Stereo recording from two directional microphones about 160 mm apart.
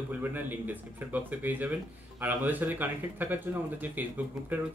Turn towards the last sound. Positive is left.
turn(degrees=-10)  # may be behind; listen again after turning